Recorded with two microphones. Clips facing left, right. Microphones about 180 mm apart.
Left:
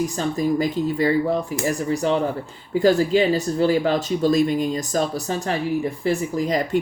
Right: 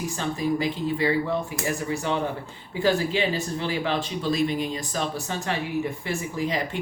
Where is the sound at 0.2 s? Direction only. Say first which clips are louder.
Left 3 dB; 40° left (ahead or behind).